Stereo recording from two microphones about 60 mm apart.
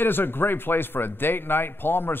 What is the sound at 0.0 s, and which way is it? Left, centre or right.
Speech, left.